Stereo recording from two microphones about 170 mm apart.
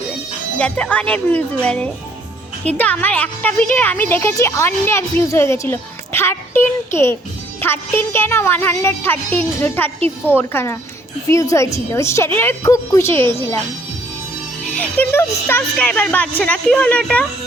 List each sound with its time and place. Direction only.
0.6 s speech: 10° left (ahead or behind)
14.8 s speech: 10° left (ahead or behind)